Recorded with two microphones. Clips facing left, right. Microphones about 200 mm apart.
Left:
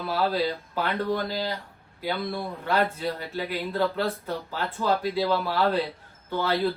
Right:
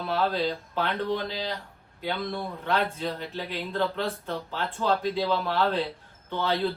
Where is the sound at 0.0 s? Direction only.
5° left (ahead or behind).